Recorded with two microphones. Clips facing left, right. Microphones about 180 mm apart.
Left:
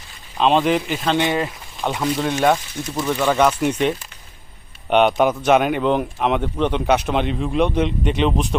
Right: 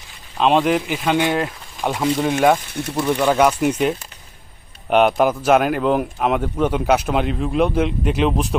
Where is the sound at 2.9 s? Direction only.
10° right (ahead or behind).